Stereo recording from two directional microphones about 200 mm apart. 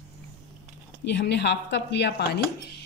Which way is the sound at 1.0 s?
60° left (ahead or behind).